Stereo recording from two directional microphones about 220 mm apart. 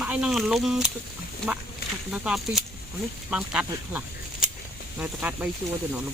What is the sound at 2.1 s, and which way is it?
Speech, centre (ahead or behind).